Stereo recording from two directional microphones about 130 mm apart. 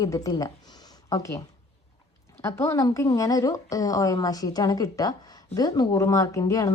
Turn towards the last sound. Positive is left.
turn(degrees=25)  # may be behind; listen again after turning